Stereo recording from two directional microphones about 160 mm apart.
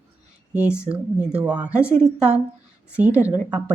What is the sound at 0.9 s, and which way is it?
Speech, 5° right (ahead or behind).